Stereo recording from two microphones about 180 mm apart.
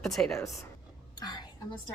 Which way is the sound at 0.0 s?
Centre (ahead or behind).